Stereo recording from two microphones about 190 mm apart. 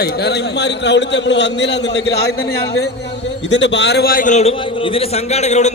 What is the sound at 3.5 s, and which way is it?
A man's voice, 70° left (ahead or behind).